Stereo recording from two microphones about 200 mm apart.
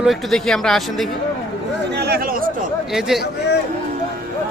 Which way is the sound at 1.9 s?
55° right (ahead or behind).